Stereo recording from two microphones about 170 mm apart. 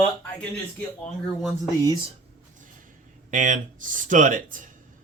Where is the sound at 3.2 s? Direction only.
50° right (ahead or behind).